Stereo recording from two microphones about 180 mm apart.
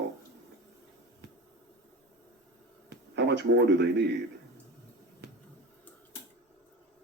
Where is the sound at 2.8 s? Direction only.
70° right (ahead or behind).